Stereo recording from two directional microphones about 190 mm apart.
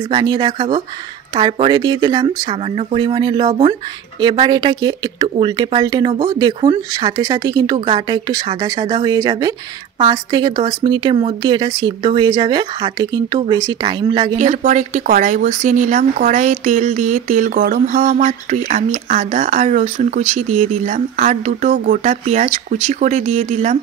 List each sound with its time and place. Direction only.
0.1 s speech: 25° right (ahead or behind)
14.3 s speech: 40° right (ahead or behind)